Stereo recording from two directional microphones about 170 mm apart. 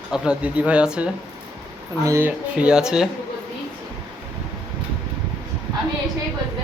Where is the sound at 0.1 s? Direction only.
5° right (ahead or behind).